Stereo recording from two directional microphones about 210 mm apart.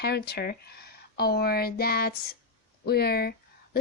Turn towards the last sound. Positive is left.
turn(degrees=50)  # may be behind; listen again after turning